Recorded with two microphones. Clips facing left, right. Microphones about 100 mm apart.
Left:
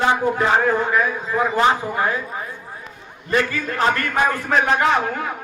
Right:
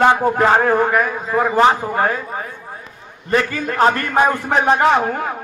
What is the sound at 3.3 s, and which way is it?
A man's voice, 40° right (ahead or behind).